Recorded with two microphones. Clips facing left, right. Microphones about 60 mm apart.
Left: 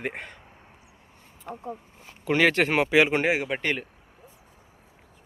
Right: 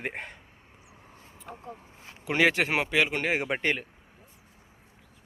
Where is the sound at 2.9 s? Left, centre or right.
Left.